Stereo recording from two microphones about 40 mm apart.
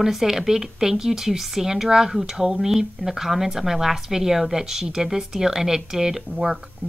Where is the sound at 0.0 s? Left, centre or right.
Centre.